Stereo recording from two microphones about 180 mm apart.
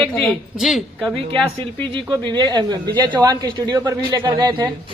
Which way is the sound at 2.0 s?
25° right (ahead or behind).